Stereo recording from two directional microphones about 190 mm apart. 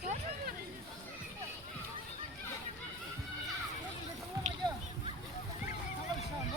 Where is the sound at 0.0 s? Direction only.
50° right (ahead or behind).